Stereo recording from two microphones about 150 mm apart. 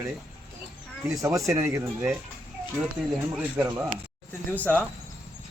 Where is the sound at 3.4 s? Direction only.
10° right (ahead or behind).